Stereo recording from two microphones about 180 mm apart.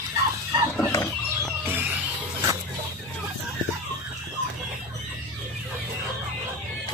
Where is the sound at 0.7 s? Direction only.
15° left (ahead or behind).